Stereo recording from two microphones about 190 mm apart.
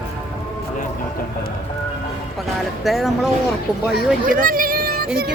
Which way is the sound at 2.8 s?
Centre (ahead or behind).